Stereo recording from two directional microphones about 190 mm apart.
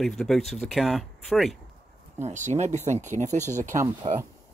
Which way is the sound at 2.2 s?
40° right (ahead or behind).